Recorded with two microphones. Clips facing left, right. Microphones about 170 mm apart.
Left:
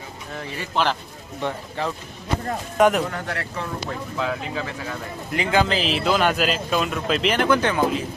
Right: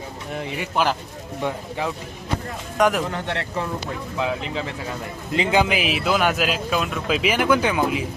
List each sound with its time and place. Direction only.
0.3 s speech: 15° right (ahead or behind)
2.7 s speech: centre (ahead or behind)
3.1 s speech: 25° right (ahead or behind)